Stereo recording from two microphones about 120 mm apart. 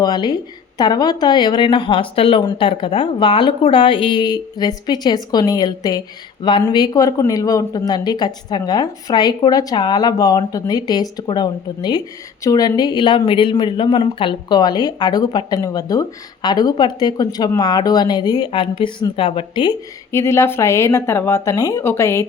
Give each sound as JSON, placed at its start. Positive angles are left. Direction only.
{"t": 0.0, "sound": "speech", "side_deg": 40}
{"t": 20.1, "sound": "speech", "side_deg": 25}